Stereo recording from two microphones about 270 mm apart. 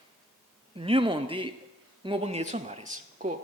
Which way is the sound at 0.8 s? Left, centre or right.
Centre.